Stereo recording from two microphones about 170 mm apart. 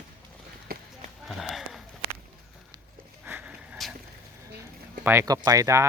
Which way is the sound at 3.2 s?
10° right (ahead or behind).